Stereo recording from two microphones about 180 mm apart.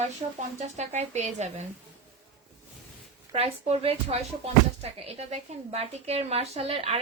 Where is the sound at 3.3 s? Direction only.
35° right (ahead or behind).